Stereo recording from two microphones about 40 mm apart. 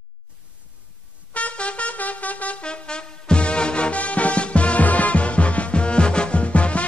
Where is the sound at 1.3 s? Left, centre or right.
Left.